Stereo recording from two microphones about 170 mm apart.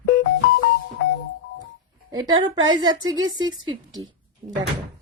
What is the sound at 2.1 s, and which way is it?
A woman's voice, 25° right (ahead or behind).